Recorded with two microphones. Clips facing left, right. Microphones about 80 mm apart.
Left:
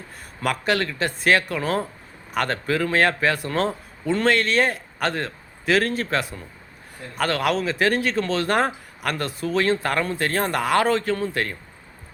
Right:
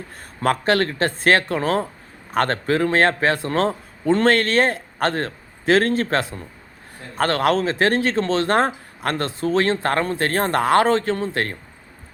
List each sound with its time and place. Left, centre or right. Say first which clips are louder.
0.4 s a man's voice: right 4 dB; right